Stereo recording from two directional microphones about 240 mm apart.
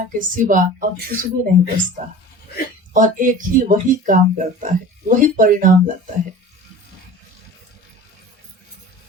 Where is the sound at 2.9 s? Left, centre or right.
Right.